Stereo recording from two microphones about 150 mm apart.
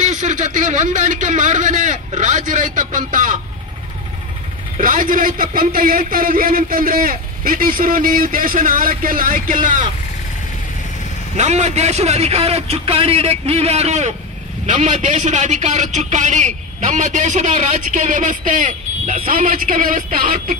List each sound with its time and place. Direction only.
0.0 s a man's voice: 55° right (ahead or behind)
4.7 s a man's voice: 60° right (ahead or behind)
11.3 s a man's voice: 50° right (ahead or behind); by 20.5 s 70° right (ahead or behind)